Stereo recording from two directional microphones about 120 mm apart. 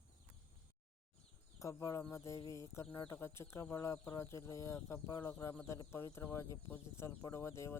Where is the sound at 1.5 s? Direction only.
25° left (ahead or behind).